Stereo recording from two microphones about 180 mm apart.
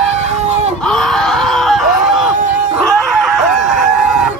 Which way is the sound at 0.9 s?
5° left (ahead or behind).